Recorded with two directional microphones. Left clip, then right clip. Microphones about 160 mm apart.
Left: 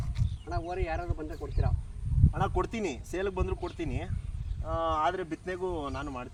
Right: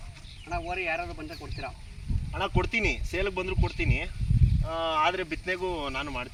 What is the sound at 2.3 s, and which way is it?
Speech, 15° left (ahead or behind).